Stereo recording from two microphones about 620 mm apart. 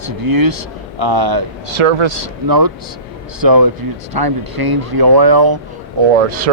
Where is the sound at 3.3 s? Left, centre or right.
Right.